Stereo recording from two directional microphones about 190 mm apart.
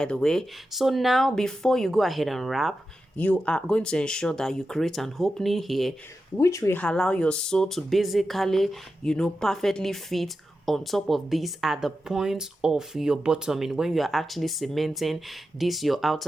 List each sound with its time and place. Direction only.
0.0 s speech: 5° left (ahead or behind)
6.3 s speech: 15° left (ahead or behind); by 16.2 s centre (ahead or behind)